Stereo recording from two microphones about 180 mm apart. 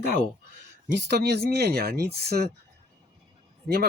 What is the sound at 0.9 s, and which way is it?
Speech, 70° right (ahead or behind).